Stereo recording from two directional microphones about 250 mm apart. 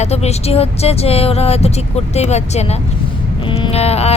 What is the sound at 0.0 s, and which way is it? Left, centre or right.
Speech, left.